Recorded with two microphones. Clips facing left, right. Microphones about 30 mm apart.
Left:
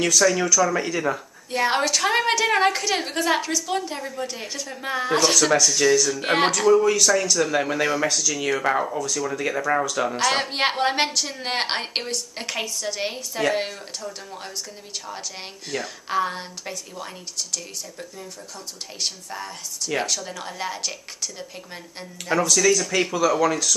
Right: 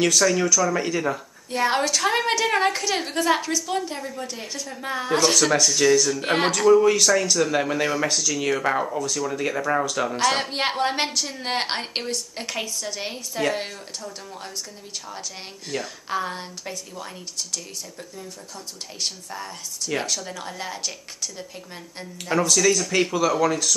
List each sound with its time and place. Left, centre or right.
0.2 s a woman's voice: centre
5.3 s speech: centre
6.1 s a woman's voice: centre
6.9 s speech: centre
7.2 s a woman's voice: centre
15.7 s a woman's voice: centre
18.9 s speech: centre
22.3 s speech: centre